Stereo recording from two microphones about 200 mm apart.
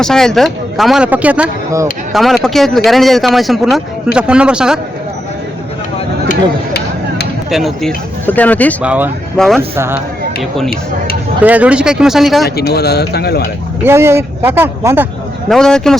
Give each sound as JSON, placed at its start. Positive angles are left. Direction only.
{"t": 0.0, "sound": "speech", "side_deg": 0}
{"t": 2.1, "sound": "speech", "side_deg": 0}
{"t": 7.5, "sound": "speech", "side_deg": 0}
{"t": 8.8, "sound": "speech", "side_deg": -5}
{"t": 11.4, "sound": "speech", "side_deg": -5}
{"t": 12.5, "sound": "a man's voice", "side_deg": 55}
{"t": 13.8, "sound": "speech", "side_deg": -10}
{"t": 15.4, "sound": "speech", "side_deg": 5}